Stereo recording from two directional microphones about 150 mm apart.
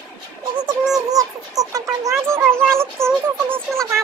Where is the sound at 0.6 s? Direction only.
5° right (ahead or behind).